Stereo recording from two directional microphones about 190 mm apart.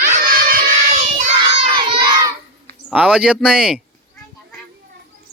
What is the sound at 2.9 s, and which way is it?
Speech, 5° right (ahead or behind).